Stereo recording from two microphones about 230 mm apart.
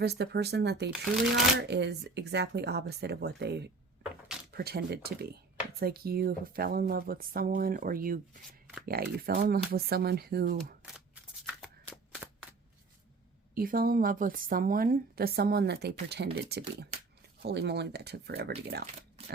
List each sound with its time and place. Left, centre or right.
0.0 s a woman's voice: right
10.9 s shuffling cards: centre
12.1 s a sound: centre
13.6 s a woman's voice: right